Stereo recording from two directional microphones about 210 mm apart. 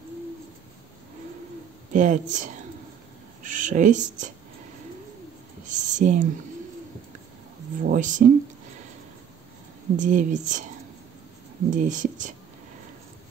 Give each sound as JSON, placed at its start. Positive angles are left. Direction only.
{"t": 1.9, "sound": "speech", "side_deg": -35}
{"t": 5.7, "sound": "a sound", "side_deg": -35}
{"t": 7.8, "sound": "speech", "side_deg": -35}
{"t": 9.9, "sound": "speech", "side_deg": -35}
{"t": 11.7, "sound": "speech", "side_deg": -35}